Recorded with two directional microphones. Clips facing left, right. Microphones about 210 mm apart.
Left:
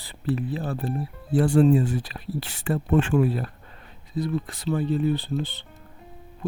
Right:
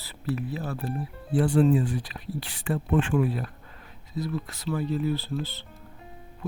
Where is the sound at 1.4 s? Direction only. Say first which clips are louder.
Left 3 dB; 40° left (ahead or behind).